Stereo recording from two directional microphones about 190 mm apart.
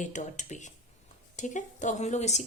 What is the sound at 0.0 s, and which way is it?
Speech, 40° left (ahead or behind).